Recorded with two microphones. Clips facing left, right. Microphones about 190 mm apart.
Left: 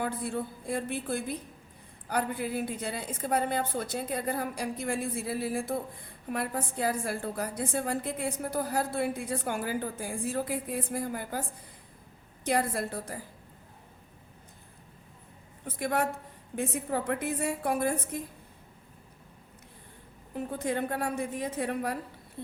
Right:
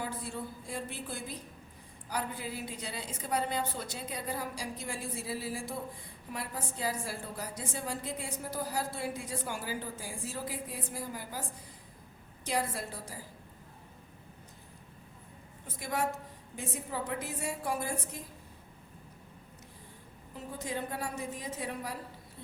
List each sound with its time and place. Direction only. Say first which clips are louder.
0.0 s a woman's voice: left 6 dB; 55° left (ahead or behind)
12.5 s a woman's voice: left 5 dB; 55° left (ahead or behind)
15.6 s a woman's voice: left 4 dB; 60° left (ahead or behind)
20.3 s a woman's voice: left 7 dB; 60° left (ahead or behind)